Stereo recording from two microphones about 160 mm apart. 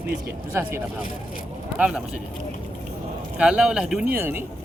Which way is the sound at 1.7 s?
5° right (ahead or behind).